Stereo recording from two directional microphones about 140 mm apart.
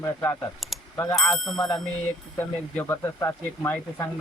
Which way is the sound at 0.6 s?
Centre (ahead or behind).